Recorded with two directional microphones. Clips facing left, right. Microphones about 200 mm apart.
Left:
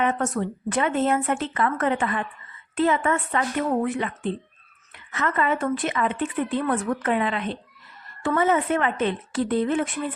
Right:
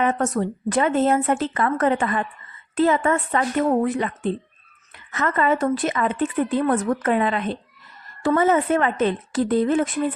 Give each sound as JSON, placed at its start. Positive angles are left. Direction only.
{"t": 0.0, "sound": "a woman's voice", "side_deg": -40}